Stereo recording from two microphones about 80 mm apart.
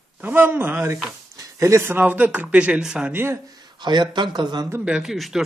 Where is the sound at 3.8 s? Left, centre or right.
Right.